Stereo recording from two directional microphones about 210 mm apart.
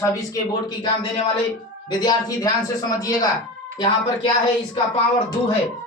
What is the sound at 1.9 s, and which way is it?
A man's voice, 20° left (ahead or behind).